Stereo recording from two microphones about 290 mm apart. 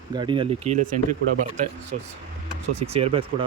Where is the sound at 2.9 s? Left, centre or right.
Right.